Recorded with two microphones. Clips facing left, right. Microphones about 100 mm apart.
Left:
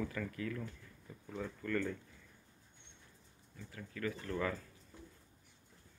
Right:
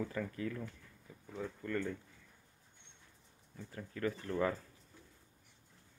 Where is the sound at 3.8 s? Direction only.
25° right (ahead or behind).